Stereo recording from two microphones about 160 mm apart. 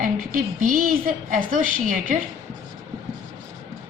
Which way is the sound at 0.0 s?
60° right (ahead or behind).